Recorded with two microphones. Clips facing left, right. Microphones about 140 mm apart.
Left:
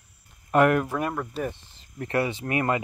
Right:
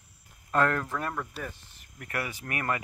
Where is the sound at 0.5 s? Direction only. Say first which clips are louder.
Left 6 dB; 15° left (ahead or behind).